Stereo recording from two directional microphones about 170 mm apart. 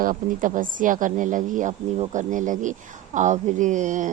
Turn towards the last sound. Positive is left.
turn(degrees=-45)  # may be behind; listen again after turning